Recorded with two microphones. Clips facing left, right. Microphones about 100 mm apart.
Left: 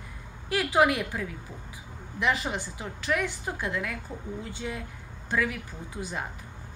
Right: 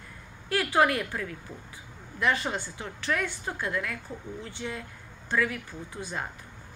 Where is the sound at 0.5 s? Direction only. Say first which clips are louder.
Left 1 dB; 20° left (ahead or behind).